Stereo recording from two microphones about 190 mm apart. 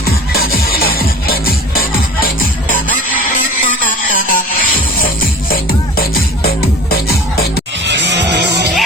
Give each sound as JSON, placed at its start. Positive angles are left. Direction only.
{"t": 0.0, "sound": "music", "side_deg": 55}
{"t": 4.1, "sound": "music", "side_deg": 50}
{"t": 7.9, "sound": "music", "side_deg": -65}